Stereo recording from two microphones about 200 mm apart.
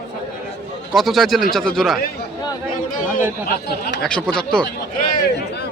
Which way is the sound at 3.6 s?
55° left (ahead or behind).